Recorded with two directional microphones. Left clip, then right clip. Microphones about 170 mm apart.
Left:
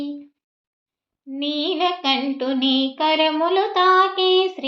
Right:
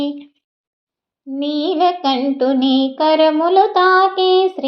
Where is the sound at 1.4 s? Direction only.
35° right (ahead or behind).